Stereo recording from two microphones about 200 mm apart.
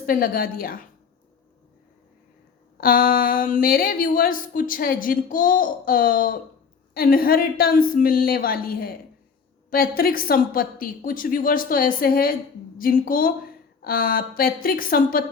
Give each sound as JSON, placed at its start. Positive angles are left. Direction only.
{"t": 0.0, "sound": "speech", "side_deg": 45}
{"t": 2.7, "sound": "speech", "side_deg": 45}